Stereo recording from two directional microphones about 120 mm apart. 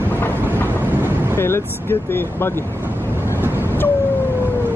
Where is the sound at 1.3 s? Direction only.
20° left (ahead or behind).